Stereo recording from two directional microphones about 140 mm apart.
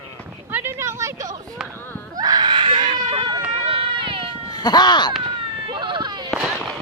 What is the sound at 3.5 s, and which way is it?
Run, 45° right (ahead or behind).